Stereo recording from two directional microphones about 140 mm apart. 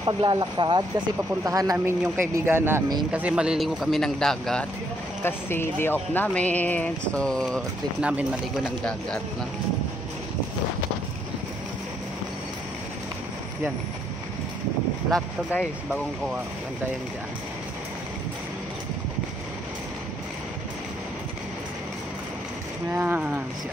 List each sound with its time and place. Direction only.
0.0 s a man's voice: 30° right (ahead or behind); by 4.6 s 5° left (ahead or behind)
5.2 s speech: 15° left (ahead or behind)
8.0 s a man's voice: 10° right (ahead or behind)
8.6 s speech: 5° left (ahead or behind)
15.0 s speech: 10° left (ahead or behind)
22.8 s a man's voice: 15° right (ahead or behind)